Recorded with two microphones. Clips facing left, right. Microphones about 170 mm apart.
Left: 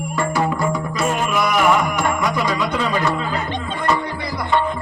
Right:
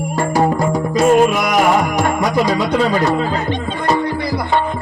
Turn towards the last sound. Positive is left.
turn(degrees=-35)  # may be behind; listen again after turning